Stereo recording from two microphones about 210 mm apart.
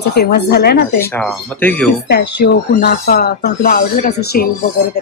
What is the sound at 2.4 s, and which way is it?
A man's voice, 40° left (ahead or behind).